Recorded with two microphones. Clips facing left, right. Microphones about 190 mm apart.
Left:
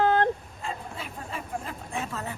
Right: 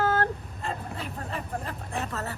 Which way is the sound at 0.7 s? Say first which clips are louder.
Right 2 dB; 40° right (ahead or behind).